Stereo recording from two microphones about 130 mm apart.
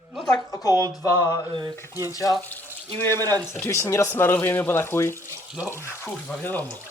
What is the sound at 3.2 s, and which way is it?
Speech, 25° right (ahead or behind).